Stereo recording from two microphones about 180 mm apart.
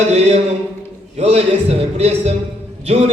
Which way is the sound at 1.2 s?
35° right (ahead or behind).